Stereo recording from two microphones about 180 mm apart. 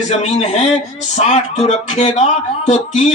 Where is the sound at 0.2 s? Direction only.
35° left (ahead or behind).